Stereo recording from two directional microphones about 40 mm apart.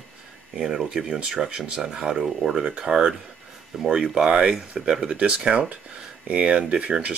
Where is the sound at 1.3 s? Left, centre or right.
Centre.